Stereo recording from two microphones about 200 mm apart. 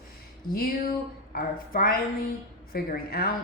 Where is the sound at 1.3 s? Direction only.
45° left (ahead or behind).